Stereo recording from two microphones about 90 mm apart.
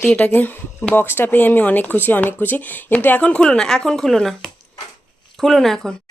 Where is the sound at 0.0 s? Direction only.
5° left (ahead or behind).